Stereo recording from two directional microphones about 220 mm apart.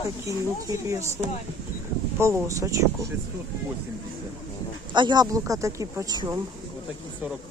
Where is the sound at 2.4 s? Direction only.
15° right (ahead or behind).